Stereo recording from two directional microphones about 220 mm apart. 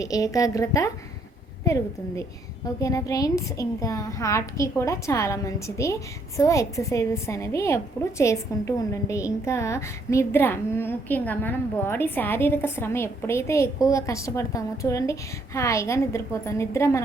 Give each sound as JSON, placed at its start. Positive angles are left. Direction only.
{"t": 0.0, "sound": "a woman's voice", "side_deg": 15}